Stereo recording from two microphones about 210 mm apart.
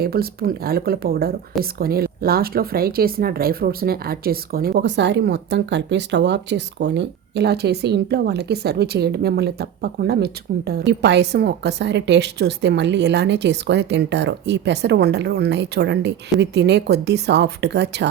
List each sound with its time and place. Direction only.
0.0 s speech: 45° right (ahead or behind)